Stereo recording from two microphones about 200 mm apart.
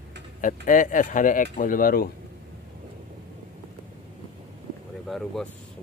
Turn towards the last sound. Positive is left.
turn(degrees=0)  # may be behind; listen again after turning